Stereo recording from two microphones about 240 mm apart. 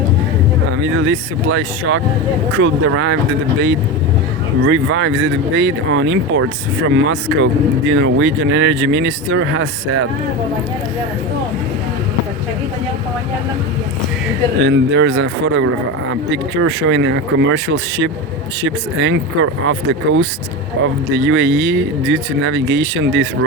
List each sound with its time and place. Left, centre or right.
0.8 s speech: right
4.6 s speech: right
14.6 s speech: right
21.2 s speech: right